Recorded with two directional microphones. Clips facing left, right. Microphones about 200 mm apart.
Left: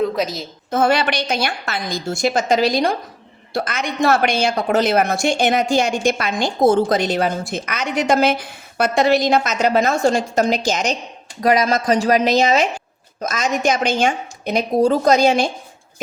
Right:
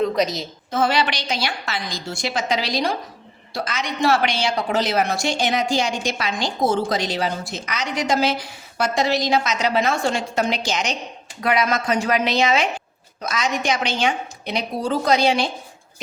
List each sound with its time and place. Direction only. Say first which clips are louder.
0.0 s a woman's voice: even; centre (ahead or behind)
0.7 s a woman's voice: left 4 dB; 50° left (ahead or behind)